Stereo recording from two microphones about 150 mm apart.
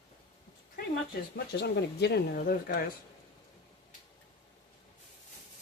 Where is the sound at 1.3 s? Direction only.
90° left.